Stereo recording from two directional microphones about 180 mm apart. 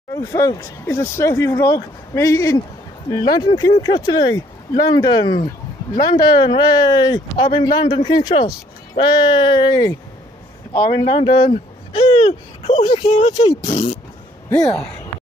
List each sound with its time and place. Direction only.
0.1 s speech: 20° left (ahead or behind)
13.3 s speech: 20° left (ahead or behind)
13.7 s speech: 35° left (ahead or behind)